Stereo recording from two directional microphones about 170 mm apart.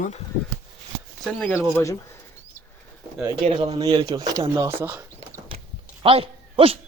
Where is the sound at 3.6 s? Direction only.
30° right (ahead or behind); by 5.0 s 15° right (ahead or behind).